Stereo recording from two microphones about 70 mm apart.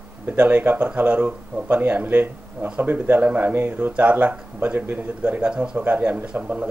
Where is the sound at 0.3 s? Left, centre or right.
Right.